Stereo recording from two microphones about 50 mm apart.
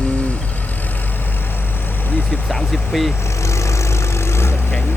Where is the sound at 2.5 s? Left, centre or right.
Centre.